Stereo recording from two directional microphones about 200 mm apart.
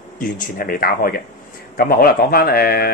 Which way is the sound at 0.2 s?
45° left (ahead or behind).